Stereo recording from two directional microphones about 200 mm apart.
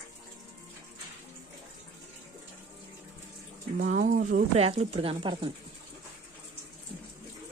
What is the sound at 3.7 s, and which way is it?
Speech, 40° right (ahead or behind).